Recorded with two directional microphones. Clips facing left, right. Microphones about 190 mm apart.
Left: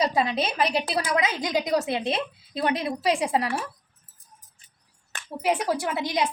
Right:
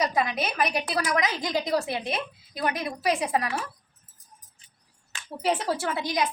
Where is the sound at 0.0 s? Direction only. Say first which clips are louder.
Left 2 dB; 30° left (ahead or behind).